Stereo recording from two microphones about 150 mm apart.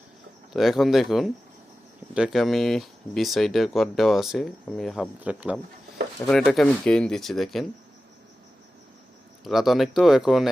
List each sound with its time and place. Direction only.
0.5 s speech: centre (ahead or behind)
6.2 s speech: 5° left (ahead or behind)
9.4 s speech: centre (ahead or behind)